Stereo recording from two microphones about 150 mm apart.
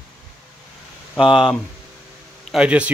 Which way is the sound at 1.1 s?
Centre (ahead or behind).